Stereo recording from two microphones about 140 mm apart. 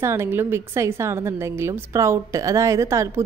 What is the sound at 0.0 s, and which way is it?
A woman's voice, 20° right (ahead or behind).